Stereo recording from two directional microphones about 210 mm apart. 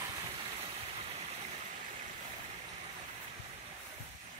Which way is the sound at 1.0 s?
30° right (ahead or behind).